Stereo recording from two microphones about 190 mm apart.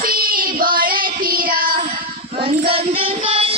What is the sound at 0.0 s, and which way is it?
Child singing, 50° right (ahead or behind).